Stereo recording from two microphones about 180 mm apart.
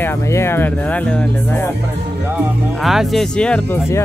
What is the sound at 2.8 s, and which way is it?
Speech, centre (ahead or behind).